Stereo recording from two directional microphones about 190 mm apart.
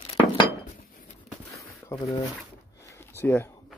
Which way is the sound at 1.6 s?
15° left (ahead or behind).